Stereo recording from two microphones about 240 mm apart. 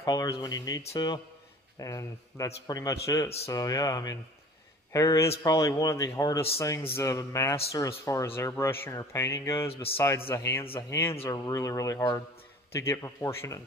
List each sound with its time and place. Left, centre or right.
0.0 s speech: centre